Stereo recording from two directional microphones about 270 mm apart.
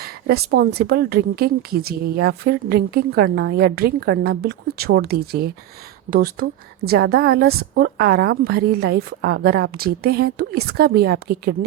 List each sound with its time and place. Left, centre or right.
0.0 s a woman's voice: right